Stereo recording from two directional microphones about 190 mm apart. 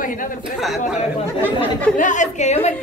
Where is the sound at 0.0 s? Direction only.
45° left (ahead or behind).